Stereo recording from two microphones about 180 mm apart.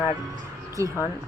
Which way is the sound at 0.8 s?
15° right (ahead or behind).